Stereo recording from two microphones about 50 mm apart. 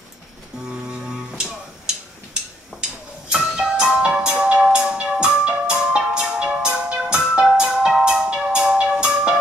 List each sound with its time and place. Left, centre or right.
0.7 s music: centre
3.3 s music: centre